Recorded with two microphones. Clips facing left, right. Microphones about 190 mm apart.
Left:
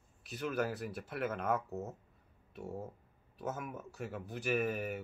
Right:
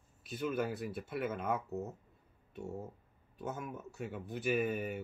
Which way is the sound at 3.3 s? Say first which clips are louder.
Left 1 dB; centre (ahead or behind).